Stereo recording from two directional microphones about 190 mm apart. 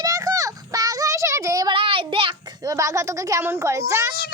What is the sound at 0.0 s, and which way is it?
Child singing, 20° right (ahead or behind).